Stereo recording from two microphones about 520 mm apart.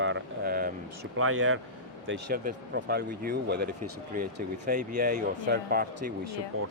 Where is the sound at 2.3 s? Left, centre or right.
Centre.